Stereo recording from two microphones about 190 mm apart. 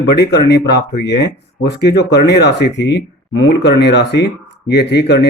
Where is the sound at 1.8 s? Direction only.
60° left (ahead or behind).